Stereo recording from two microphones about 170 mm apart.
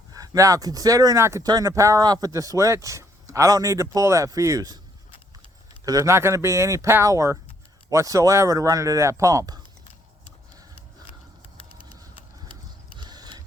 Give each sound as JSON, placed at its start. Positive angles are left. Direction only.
{"t": 0.1, "sound": "speech", "side_deg": -20}
{"t": 5.8, "sound": "speech", "side_deg": -20}
{"t": 13.0, "sound": "scissors", "side_deg": -25}